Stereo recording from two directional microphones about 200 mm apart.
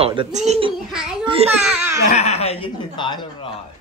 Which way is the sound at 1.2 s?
25° right (ahead or behind).